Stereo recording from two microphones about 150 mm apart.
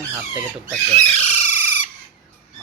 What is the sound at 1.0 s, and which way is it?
Squawk, 50° left (ahead or behind).